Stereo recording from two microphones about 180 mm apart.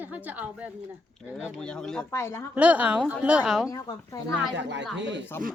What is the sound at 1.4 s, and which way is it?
Speech, centre (ahead or behind).